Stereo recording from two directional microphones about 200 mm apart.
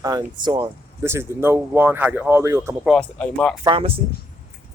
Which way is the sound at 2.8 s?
5° left (ahead or behind).